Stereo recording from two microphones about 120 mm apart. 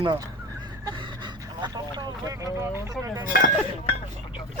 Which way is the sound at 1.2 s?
35° right (ahead or behind).